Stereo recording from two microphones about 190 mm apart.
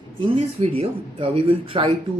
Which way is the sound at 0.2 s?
30° right (ahead or behind).